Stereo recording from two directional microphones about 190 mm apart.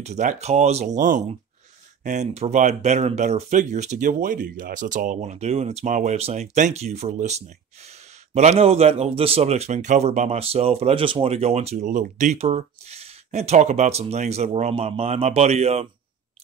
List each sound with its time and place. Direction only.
0.0 s speech: 35° right (ahead or behind)